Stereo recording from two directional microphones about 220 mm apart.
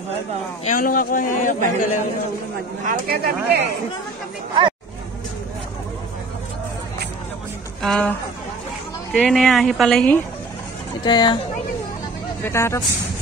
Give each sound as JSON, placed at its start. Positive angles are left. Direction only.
{"t": 0.7, "sound": "a man's voice", "side_deg": 40}
{"t": 1.8, "sound": "a man's voice", "side_deg": 90}
{"t": 2.8, "sound": "speech", "side_deg": -40}
{"t": 7.8, "sound": "speech", "side_deg": 5}
{"t": 11.1, "sound": "speech", "side_deg": 20}
{"t": 12.4, "sound": "speech", "side_deg": 10}